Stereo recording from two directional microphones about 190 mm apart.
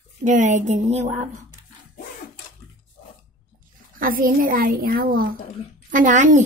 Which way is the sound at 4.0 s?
50° right (ahead or behind).